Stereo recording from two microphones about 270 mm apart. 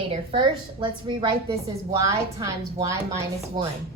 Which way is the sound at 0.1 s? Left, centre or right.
Centre.